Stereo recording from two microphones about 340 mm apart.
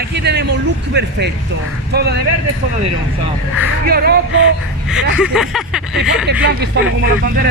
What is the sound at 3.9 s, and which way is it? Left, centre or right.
Speech, right.